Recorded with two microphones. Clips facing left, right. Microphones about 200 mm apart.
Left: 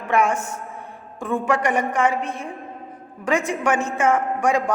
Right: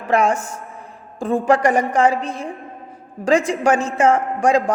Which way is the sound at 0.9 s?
35° right (ahead or behind).